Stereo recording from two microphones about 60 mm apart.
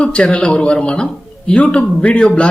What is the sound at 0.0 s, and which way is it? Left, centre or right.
A man's voice, centre.